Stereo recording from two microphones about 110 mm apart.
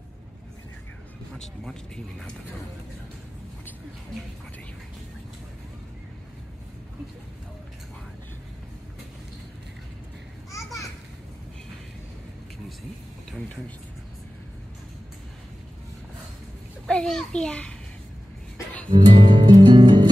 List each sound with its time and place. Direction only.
1.3 s speech: 5° left (ahead or behind)
10.5 s children playing: 30° left (ahead or behind)
16.8 s a child's voice: 5° left (ahead or behind)
18.9 s music: 45° right (ahead or behind)